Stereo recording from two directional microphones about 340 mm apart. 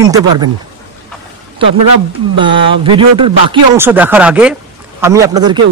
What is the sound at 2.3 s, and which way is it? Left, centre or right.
Speech, centre.